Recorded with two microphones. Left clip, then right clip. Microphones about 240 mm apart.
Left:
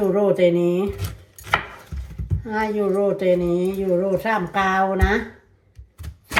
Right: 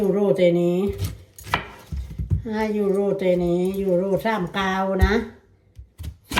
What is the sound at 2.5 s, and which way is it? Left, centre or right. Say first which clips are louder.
Speech: left 1 dB; centre.